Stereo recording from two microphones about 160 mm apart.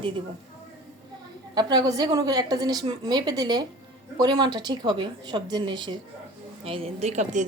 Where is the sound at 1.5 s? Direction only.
25° right (ahead or behind).